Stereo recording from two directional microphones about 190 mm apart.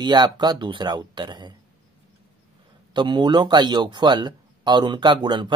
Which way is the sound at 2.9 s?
25° right (ahead or behind).